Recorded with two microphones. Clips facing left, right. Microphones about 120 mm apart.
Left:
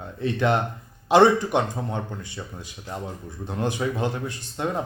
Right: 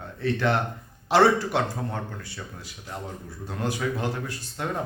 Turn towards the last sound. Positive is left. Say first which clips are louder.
# left 3 dB
turn(degrees=20)  # may be behind; listen again after turning